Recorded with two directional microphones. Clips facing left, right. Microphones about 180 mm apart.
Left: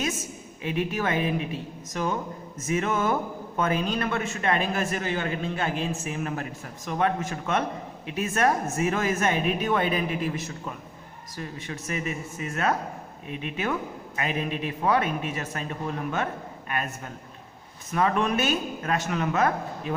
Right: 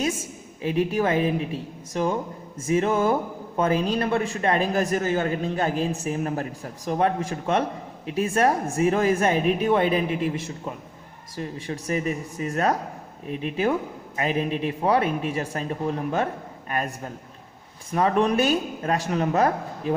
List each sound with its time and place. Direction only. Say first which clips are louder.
0.6 s a man's voice: right 5 dB; 35° right (ahead or behind)